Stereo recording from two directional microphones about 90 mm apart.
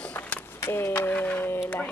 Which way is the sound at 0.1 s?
25° left (ahead or behind).